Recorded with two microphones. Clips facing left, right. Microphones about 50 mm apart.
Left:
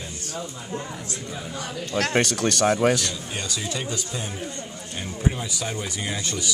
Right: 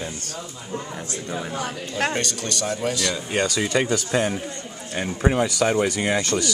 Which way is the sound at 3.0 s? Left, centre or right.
Right.